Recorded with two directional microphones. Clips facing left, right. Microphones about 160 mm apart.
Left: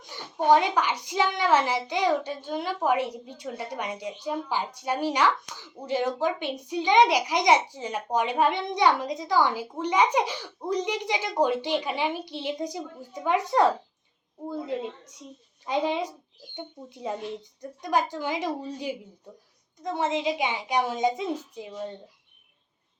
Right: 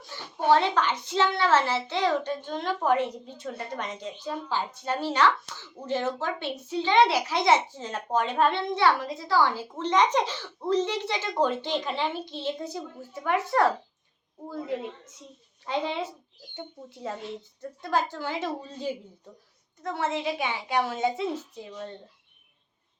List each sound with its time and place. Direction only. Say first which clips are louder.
0.0 s a woman's voice: left 2 dB; 15° left (ahead or behind)
15.6 s a woman's voice: left 3 dB; 15° left (ahead or behind)